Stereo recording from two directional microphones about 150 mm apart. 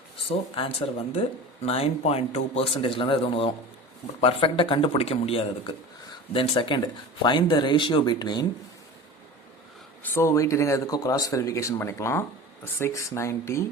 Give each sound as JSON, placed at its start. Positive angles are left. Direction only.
{"t": 0.3, "sound": "speech", "side_deg": 35}
{"t": 10.0, "sound": "speech", "side_deg": 20}